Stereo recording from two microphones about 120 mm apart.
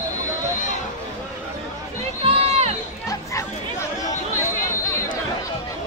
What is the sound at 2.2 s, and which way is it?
Run, 55° right (ahead or behind).